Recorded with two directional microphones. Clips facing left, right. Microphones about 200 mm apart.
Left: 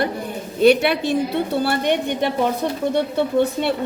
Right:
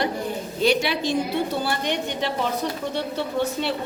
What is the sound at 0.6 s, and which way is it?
A woman's voice, 60° left (ahead or behind).